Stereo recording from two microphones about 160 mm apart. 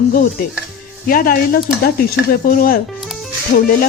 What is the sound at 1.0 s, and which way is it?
Speech, 65° left (ahead or behind).